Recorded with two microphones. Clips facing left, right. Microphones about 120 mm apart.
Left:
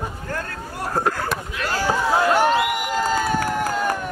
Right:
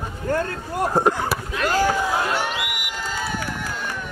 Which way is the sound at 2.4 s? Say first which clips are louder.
Left 8 dB; 45° left (ahead or behind).